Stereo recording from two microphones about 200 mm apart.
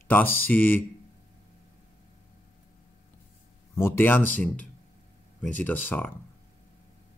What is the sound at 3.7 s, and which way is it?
Speech, 10° left (ahead or behind).